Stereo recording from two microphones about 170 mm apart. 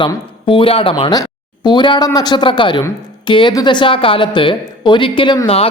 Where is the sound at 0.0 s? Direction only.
30° left (ahead or behind).